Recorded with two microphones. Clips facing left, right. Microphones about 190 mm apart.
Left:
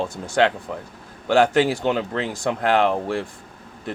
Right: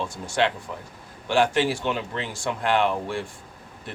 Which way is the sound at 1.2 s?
40° left (ahead or behind).